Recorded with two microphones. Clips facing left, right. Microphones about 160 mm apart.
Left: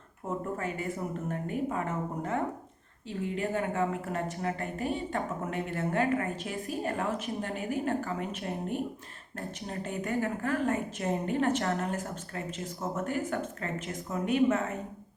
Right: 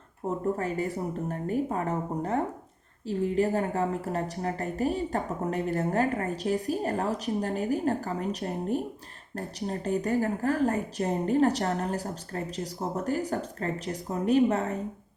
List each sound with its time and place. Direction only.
0.3 s a woman's voice: 35° right (ahead or behind)